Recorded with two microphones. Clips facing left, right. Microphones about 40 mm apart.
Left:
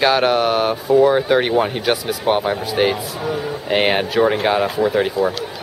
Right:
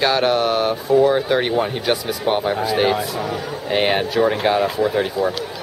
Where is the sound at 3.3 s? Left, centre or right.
Centre.